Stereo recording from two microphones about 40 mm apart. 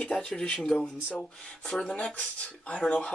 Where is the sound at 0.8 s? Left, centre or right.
Left.